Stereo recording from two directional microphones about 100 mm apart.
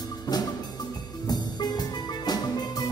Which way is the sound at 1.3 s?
45° left (ahead or behind).